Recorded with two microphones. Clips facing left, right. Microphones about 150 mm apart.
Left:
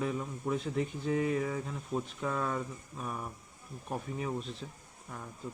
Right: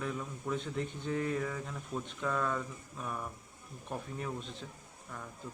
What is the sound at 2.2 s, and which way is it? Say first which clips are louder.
Speech: right 2 dB; 15° left (ahead or behind).